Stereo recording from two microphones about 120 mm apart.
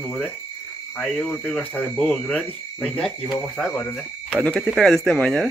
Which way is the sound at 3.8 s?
10° left (ahead or behind).